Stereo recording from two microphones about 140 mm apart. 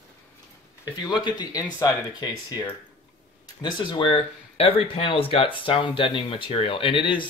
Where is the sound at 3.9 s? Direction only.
40° left (ahead or behind).